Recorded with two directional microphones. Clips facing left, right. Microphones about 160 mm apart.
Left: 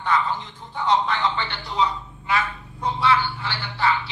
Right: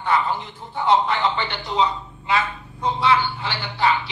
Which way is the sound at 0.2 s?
15° right (ahead or behind).